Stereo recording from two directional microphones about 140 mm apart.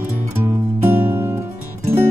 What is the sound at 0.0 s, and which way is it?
Music, 15° right (ahead or behind).